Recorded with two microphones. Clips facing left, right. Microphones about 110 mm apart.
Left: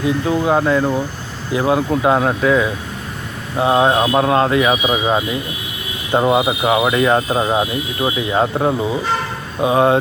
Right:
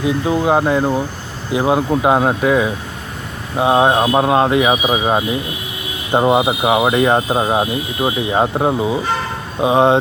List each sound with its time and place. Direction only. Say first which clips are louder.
0.4 s speech: right 1 dB; 20° right (ahead or behind)